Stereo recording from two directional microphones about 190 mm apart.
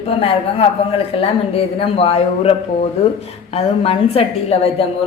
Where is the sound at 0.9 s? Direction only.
30° left (ahead or behind).